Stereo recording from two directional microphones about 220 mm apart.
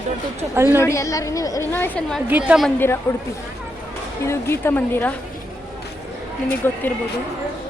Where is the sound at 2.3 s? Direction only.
5° right (ahead or behind).